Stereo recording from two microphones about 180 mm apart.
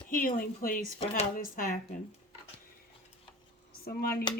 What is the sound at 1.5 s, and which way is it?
Speech, 50° left (ahead or behind).